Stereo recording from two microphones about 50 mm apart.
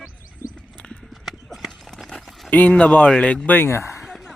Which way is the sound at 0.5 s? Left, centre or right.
Left.